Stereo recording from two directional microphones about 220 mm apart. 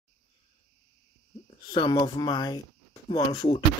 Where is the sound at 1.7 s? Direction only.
20° left (ahead or behind).